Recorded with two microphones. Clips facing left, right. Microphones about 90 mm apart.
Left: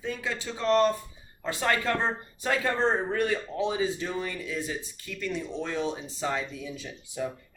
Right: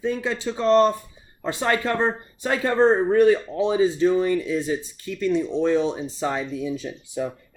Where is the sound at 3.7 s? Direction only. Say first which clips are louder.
Right 10 dB; 35° right (ahead or behind).